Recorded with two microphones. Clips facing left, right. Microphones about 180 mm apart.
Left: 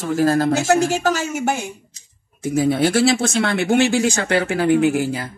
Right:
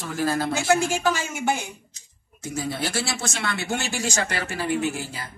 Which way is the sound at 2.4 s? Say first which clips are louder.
Left 11 dB; 55° left (ahead or behind).